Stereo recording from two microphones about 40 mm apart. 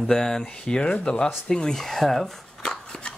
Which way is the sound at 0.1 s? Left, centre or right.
Centre.